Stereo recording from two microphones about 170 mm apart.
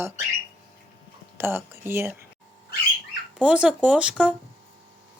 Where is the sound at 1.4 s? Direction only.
15° right (ahead or behind).